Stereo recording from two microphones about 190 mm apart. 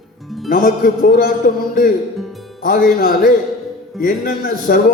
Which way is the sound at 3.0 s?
50° left (ahead or behind).